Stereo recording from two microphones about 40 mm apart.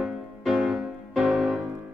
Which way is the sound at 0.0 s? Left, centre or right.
Centre.